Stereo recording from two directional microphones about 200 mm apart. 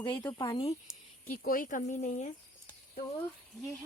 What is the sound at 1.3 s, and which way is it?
Speech, 45° left (ahead or behind).